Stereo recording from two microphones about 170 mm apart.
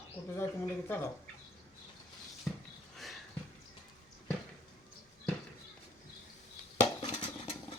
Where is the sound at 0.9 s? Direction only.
15° left (ahead or behind).